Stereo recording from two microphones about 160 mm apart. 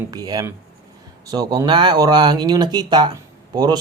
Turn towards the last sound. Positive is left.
turn(degrees=-25)  # may be behind; listen again after turning